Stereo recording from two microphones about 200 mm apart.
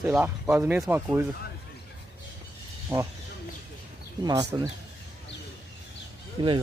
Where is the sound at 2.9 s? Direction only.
25° right (ahead or behind).